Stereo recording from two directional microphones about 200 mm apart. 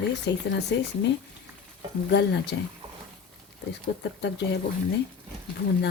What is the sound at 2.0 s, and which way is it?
Speech, 60° left (ahead or behind).